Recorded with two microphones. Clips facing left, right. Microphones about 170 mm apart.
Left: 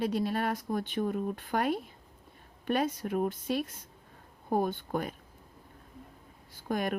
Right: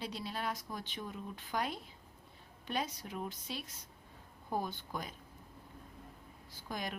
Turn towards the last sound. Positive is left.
turn(degrees=55)  # may be behind; listen again after turning